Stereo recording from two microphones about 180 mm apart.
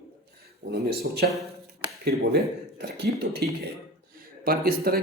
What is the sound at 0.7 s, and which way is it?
A man's voice, 60° right (ahead or behind).